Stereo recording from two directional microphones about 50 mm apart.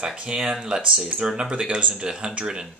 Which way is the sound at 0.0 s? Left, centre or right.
Centre.